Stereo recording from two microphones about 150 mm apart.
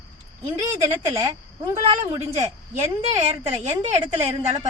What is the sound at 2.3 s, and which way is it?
A woman's voice, 50° right (ahead or behind).